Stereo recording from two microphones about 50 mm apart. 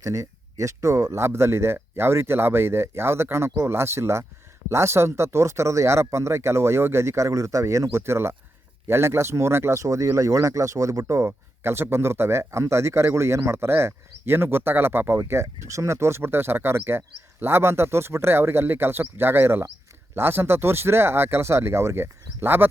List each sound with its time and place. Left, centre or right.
0.0 s speech: right
15.2 s speech: right